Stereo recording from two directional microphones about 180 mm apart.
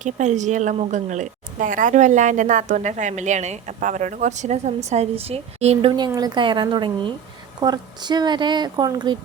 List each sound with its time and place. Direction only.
0.0 s a woman's voice: 40° right (ahead or behind)
6.1 s speech: 20° right (ahead or behind)